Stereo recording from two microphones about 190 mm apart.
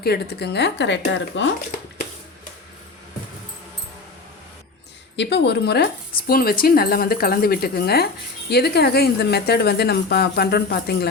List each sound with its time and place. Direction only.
0.0 s speech: 60° left (ahead or behind)
5.1 s speech: 65° left (ahead or behind)